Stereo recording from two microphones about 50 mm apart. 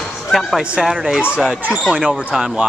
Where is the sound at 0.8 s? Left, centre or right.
Centre.